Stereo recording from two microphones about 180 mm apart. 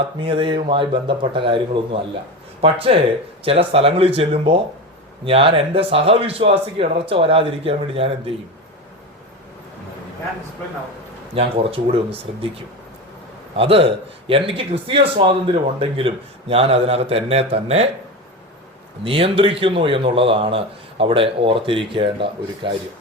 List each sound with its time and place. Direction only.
0.2 s speech: 30° right (ahead or behind)
11.3 s speech: 30° right (ahead or behind)
19.0 s speech: 30° right (ahead or behind)